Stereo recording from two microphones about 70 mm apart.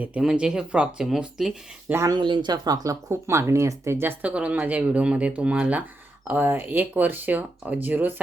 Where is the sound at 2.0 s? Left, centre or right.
Right.